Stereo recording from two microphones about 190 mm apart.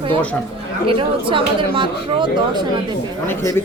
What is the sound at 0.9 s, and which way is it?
A woman's voice, 25° right (ahead or behind).